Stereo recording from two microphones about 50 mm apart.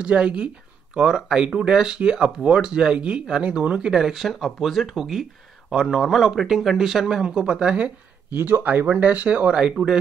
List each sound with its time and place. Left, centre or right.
0.0 s speech: right
4.3 s speech: centre
8.3 s speech: right